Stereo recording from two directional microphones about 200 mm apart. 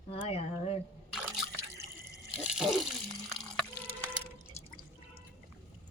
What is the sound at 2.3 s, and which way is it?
Water, 5° right (ahead or behind).